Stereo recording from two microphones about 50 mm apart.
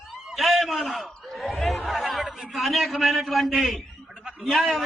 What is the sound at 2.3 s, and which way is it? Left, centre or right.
A man's voice, centre.